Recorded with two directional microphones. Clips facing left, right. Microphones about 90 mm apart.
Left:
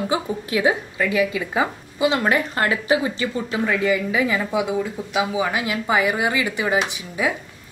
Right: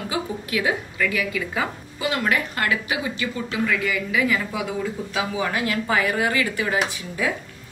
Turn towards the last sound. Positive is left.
turn(degrees=20)  # may be behind; listen again after turning